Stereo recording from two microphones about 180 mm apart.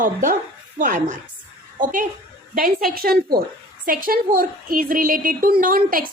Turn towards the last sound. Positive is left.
turn(degrees=-50)  # may be behind; listen again after turning